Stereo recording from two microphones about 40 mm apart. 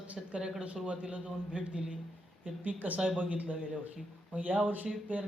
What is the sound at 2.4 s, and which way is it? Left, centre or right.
Speech, right.